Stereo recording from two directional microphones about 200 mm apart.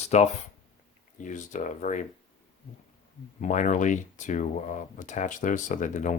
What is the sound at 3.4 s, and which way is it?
Speech, 40° left (ahead or behind).